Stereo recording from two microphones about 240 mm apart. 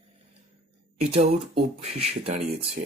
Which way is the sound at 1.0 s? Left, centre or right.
Right.